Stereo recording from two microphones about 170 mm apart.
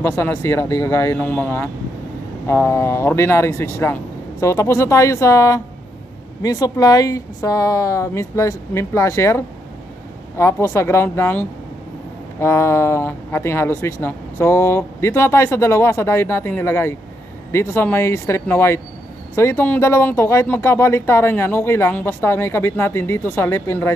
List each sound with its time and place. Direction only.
0.0 s a woman's voice: 15° left (ahead or behind)